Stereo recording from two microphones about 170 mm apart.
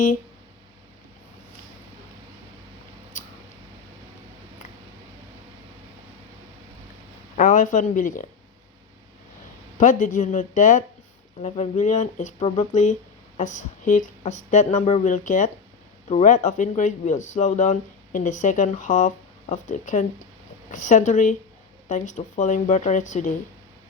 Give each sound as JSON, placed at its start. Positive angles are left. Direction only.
{"t": 7.3, "sound": "speech", "side_deg": 50}
{"t": 9.7, "sound": "speech", "side_deg": 50}